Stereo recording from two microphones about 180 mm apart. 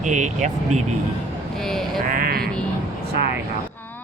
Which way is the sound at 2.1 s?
55° right (ahead or behind).